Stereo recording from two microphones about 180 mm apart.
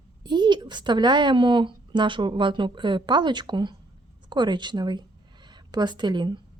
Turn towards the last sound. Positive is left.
turn(degrees=-25)  # may be behind; listen again after turning